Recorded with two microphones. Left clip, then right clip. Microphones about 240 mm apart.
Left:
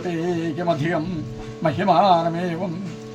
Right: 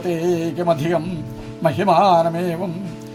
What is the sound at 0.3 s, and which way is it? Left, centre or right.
Speech, right.